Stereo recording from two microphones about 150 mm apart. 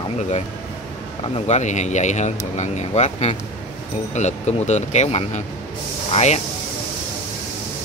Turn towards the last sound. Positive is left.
turn(degrees=45)  # may be behind; listen again after turning